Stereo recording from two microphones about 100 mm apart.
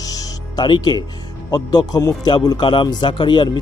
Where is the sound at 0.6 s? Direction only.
50° left (ahead or behind).